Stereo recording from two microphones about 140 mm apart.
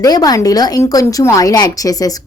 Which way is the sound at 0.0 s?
25° left (ahead or behind).